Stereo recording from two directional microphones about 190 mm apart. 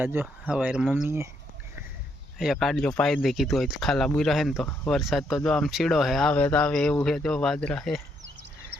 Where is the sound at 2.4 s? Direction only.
Centre (ahead or behind).